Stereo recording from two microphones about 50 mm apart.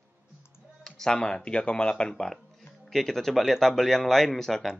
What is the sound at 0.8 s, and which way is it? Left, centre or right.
Speech, centre.